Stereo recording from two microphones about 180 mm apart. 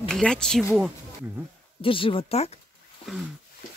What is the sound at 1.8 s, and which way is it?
Speech, 30° left (ahead or behind).